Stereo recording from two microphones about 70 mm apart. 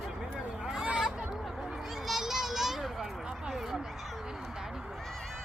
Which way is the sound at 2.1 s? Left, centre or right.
Centre.